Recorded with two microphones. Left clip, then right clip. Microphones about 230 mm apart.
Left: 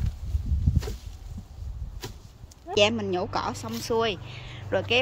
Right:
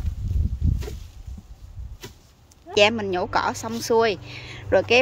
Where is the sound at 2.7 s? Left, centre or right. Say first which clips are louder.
Right 4 dB; centre.